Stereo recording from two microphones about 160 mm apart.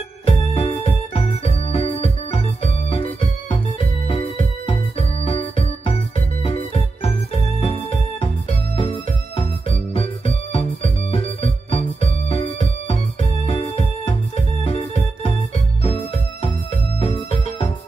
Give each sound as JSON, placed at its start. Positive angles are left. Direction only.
{"t": 0.2, "sound": "organ", "side_deg": 35}
{"t": 4.1, "sound": "music", "side_deg": 35}
{"t": 17.0, "sound": "music", "side_deg": 40}